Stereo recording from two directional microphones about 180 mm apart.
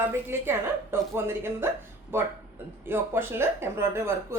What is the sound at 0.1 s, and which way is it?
Speech, 15° right (ahead or behind).